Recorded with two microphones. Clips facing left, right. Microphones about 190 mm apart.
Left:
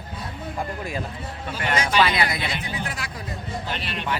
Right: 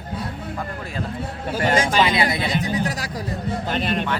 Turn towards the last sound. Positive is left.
turn(degrees=-45)  # may be behind; listen again after turning